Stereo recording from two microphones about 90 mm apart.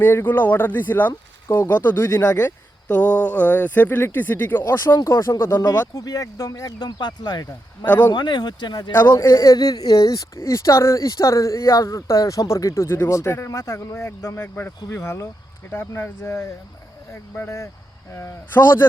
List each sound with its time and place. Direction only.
0.0 s speech: 20° left (ahead or behind)
2.9 s speech: 15° left (ahead or behind)
5.6 s speech: 40° left (ahead or behind)
8.9 s speech: 25° left (ahead or behind)
14.4 s speech: 25° left (ahead or behind)